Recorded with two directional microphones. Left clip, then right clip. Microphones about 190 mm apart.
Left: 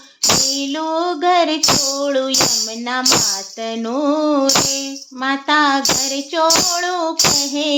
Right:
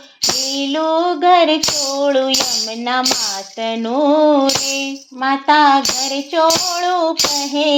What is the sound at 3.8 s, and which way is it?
Music, 10° left (ahead or behind).